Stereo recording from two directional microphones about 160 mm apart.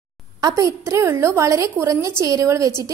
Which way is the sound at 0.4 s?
20° right (ahead or behind).